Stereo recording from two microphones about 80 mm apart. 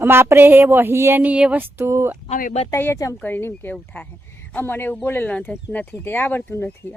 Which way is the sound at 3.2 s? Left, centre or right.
Left.